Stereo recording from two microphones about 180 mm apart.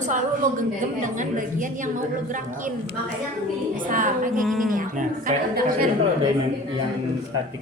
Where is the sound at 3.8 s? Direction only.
50° right (ahead or behind).